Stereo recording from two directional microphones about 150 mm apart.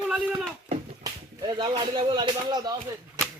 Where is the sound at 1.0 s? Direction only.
30° right (ahead or behind).